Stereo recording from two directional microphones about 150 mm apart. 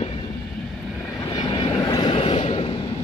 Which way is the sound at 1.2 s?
30° left (ahead or behind).